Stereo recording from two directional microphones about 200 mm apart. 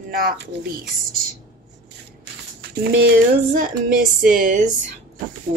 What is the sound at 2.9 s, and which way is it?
A woman's voice, 45° right (ahead or behind).